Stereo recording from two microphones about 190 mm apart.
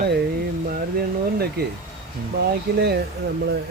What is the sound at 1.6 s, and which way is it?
Speech, 55° right (ahead or behind).